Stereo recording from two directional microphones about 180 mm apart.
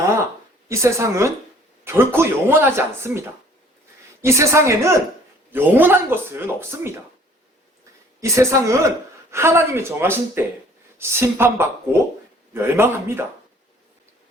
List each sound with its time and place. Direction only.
0.7 s speech: 15° right (ahead or behind)
8.2 s speech: 15° right (ahead or behind)